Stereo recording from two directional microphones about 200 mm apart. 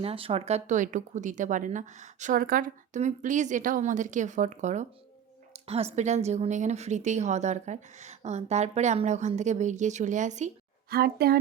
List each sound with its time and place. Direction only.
0.0 s a woman's voice: 30° right (ahead or behind)
10.9 s a child's voice: 50° right (ahead or behind)